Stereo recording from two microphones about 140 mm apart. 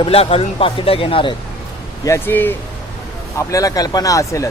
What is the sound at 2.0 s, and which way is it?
Speech, 15° left (ahead or behind).